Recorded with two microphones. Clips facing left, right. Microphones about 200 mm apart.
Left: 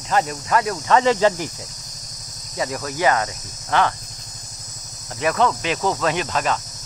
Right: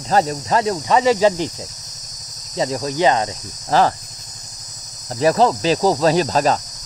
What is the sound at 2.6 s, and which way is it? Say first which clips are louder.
Cricket: right 5 dB; 25° right (ahead or behind).